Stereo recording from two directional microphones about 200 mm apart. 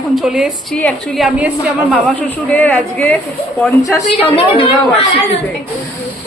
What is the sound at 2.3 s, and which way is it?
Speech, 10° left (ahead or behind).